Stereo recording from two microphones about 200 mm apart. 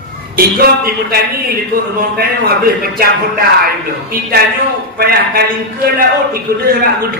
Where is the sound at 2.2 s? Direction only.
50° right (ahead or behind).